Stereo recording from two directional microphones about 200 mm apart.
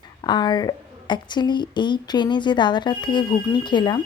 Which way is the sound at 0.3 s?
20° left (ahead or behind).